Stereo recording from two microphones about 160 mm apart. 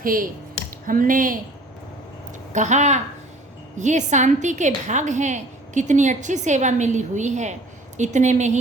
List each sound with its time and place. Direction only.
0.0 s speech: 60° right (ahead or behind)
2.5 s a woman's voice: 50° right (ahead or behind)